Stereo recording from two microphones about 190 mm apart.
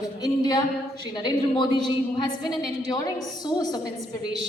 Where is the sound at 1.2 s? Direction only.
25° left (ahead or behind).